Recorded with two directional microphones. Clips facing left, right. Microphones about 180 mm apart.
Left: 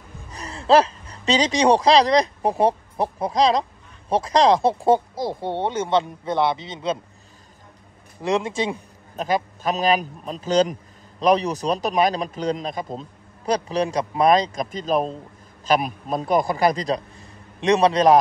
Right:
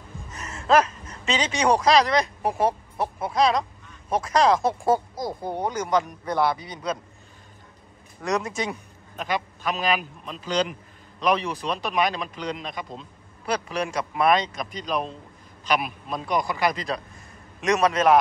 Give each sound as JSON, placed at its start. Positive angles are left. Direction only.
{"t": 0.3, "sound": "a man's voice", "side_deg": 35}
{"t": 8.2, "sound": "speech", "side_deg": 25}
{"t": 9.1, "sound": "a man's voice", "side_deg": 40}